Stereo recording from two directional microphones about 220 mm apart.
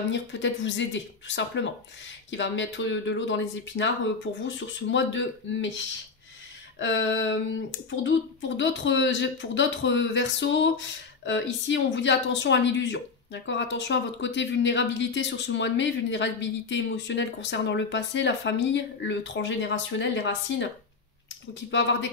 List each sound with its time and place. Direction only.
0.1 s speech: 55° left (ahead or behind)